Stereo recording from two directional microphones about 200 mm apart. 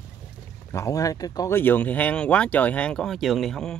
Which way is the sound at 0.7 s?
15° left (ahead or behind).